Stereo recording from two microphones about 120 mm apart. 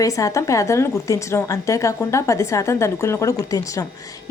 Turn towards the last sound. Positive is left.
turn(degrees=30)  # may be behind; listen again after turning